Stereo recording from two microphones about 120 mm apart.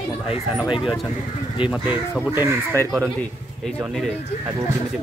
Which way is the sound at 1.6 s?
10° right (ahead or behind).